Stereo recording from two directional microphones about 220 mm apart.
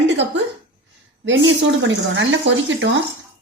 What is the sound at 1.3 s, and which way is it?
Speech, 55° right (ahead or behind).